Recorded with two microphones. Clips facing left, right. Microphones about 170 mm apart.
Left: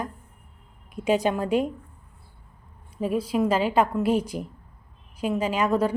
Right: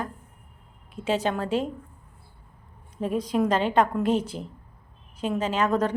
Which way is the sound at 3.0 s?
5° left (ahead or behind).